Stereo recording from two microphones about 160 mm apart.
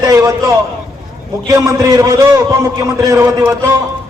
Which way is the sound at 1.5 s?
15° right (ahead or behind).